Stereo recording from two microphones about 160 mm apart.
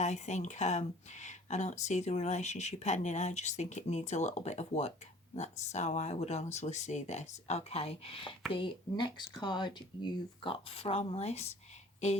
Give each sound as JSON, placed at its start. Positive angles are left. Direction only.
{"t": 0.0, "sound": "speech", "side_deg": 45}